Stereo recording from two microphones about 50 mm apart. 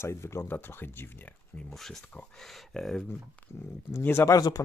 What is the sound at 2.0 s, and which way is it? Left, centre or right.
Speech, left.